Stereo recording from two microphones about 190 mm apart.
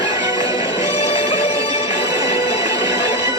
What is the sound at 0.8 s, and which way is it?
Music, 35° left (ahead or behind).